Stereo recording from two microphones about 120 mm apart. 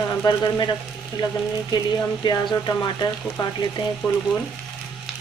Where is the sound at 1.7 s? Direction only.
35° left (ahead or behind).